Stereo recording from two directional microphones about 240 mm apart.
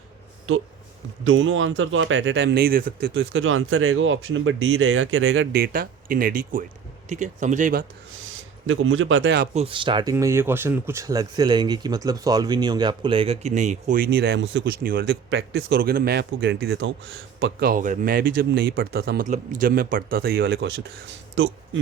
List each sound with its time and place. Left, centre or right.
1.2 s speech: right
3.2 s speech: right
8.1 s speech: right
9.6 s speech: right
17.7 s speech: right